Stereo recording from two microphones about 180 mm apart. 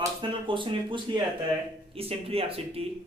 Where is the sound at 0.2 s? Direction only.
25° right (ahead or behind).